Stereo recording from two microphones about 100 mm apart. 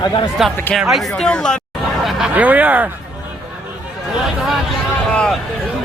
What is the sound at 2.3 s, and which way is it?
Speech, 15° right (ahead or behind).